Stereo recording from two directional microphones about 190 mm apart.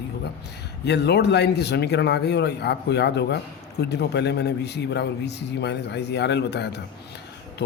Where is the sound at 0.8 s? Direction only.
60° left (ahead or behind).